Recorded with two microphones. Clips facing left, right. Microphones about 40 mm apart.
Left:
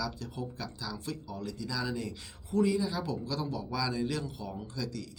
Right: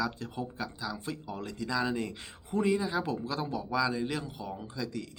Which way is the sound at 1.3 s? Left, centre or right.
Right.